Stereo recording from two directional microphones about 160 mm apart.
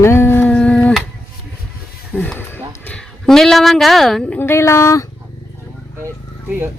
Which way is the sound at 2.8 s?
5° left (ahead or behind).